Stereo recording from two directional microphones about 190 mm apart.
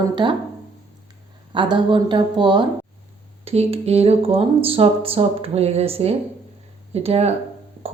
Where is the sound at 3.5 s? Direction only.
30° right (ahead or behind).